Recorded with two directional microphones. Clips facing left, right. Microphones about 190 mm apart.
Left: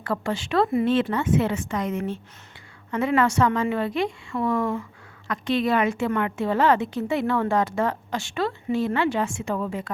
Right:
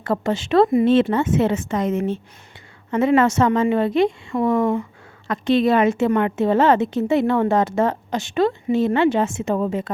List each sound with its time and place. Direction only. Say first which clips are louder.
0.0 s a woman's voice: right 5 dB; 20° right (ahead or behind)